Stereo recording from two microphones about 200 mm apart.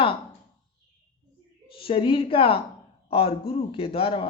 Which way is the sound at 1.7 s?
25° left (ahead or behind).